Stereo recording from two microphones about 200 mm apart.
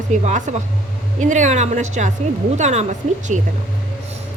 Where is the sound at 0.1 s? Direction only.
35° right (ahead or behind).